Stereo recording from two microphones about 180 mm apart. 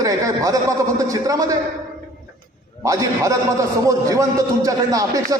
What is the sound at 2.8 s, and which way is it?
A man's voice, 20° right (ahead or behind).